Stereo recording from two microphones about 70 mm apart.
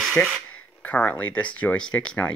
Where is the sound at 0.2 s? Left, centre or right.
Left.